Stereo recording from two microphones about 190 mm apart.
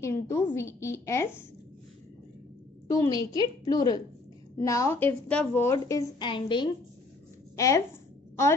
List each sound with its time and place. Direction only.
0.0 s a woman's voice: 15° left (ahead or behind)
2.9 s a woman's voice: 20° left (ahead or behind)